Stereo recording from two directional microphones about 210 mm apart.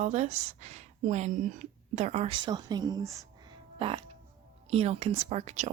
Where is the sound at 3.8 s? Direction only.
25° right (ahead or behind).